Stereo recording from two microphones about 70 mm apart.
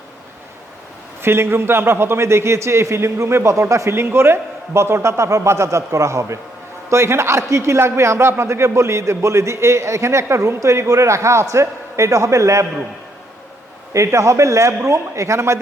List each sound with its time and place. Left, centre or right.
1.2 s a man's voice: right
13.9 s a man's voice: right